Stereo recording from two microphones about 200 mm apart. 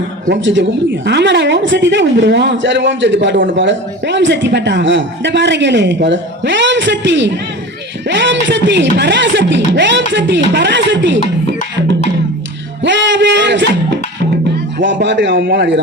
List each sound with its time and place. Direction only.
0.3 s speech: 65° right (ahead or behind)
12.8 s a sound: 65° right (ahead or behind)
15.0 s speech: 60° right (ahead or behind)